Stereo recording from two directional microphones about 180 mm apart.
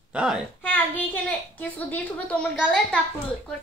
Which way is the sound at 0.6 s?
10° left (ahead or behind).